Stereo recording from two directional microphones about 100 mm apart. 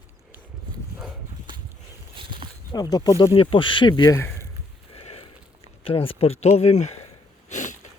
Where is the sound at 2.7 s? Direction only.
40° left (ahead or behind).